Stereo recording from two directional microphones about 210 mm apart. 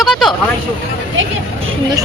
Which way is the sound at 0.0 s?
Centre (ahead or behind).